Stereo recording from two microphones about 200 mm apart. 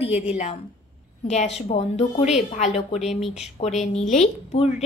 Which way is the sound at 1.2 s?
35° left (ahead or behind).